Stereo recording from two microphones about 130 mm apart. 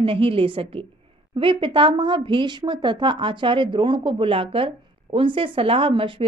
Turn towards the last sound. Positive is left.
turn(degrees=-40)  # may be behind; listen again after turning